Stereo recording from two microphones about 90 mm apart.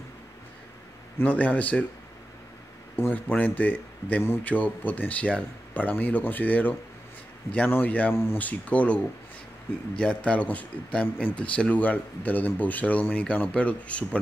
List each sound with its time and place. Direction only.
1.2 s speech: 15° left (ahead or behind)
3.0 s speech: 20° left (ahead or behind)